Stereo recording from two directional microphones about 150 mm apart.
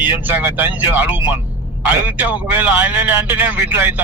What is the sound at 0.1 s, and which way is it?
A man's voice, 10° right (ahead or behind).